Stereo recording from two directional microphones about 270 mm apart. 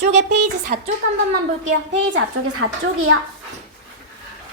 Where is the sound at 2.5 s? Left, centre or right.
Right.